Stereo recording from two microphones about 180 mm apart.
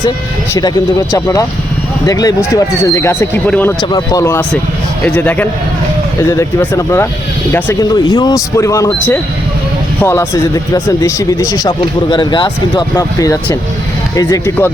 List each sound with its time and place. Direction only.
1.1 s speech: 20° left (ahead or behind)
3.8 s speech: 20° left (ahead or behind)